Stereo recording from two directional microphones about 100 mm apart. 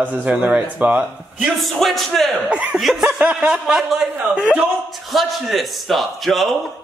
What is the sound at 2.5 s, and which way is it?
A man's voice, 10° right (ahead or behind).